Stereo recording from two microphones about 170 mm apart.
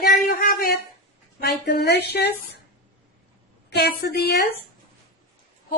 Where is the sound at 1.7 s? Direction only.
75° left (ahead or behind).